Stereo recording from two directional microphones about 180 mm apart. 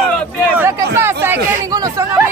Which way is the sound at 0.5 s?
15° right (ahead or behind).